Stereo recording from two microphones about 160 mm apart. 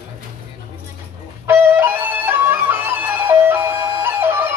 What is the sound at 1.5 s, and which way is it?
Music, 15° right (ahead or behind).